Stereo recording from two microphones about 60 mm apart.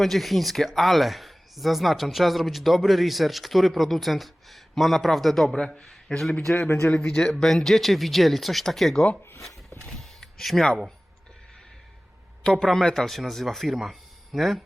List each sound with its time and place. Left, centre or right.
0.0 s speech: centre
5.5 s speech: centre
6.7 s speech: left
7.2 s speech: centre
9.6 s a sound: centre
12.4 s speech: centre